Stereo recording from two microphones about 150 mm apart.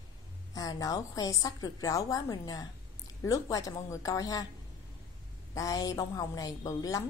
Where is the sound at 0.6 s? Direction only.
25° left (ahead or behind).